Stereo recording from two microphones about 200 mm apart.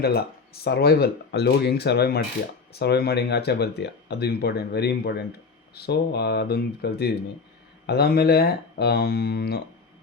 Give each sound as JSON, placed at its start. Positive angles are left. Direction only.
{"t": 0.0, "sound": "speech", "side_deg": 50}